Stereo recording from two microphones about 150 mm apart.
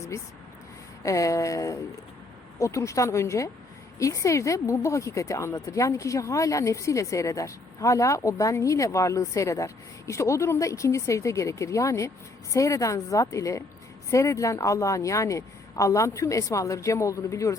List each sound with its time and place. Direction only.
1.0 s a woman's voice: 20° left (ahead or behind)